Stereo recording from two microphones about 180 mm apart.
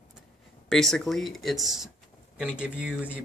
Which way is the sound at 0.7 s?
Centre (ahead or behind).